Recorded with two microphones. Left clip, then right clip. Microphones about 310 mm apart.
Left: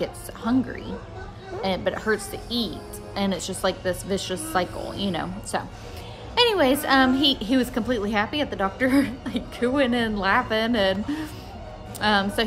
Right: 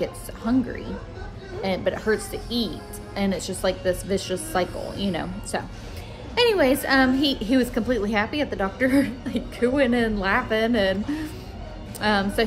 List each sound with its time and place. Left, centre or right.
0.0 s a woman's voice: centre
12.0 s a woman's voice: centre